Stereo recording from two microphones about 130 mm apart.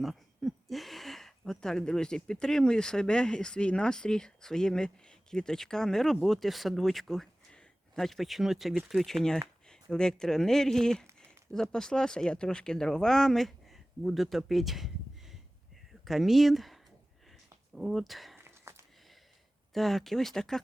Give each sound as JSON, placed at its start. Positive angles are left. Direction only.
{"t": 0.0, "sound": "speech", "side_deg": 0}
{"t": 15.9, "sound": "speech", "side_deg": 0}
{"t": 18.3, "sound": "a sound", "side_deg": -20}
{"t": 19.7, "sound": "speech", "side_deg": 0}